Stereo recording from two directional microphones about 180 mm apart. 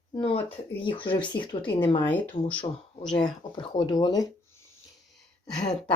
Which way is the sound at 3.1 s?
25° left (ahead or behind).